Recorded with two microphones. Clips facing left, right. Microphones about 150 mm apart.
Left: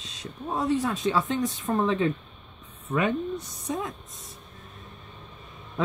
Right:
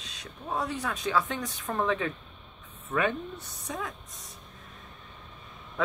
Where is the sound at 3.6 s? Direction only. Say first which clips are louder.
Left 3 dB; 25° left (ahead or behind).